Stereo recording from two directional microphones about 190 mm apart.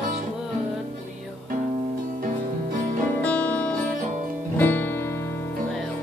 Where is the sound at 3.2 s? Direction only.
5° left (ahead or behind).